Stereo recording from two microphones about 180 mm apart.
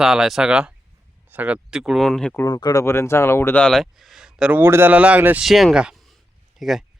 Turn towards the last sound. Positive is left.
turn(degrees=0)  # may be behind; listen again after turning